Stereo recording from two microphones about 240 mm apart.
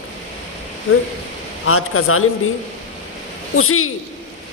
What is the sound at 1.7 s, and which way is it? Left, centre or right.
Speech, left.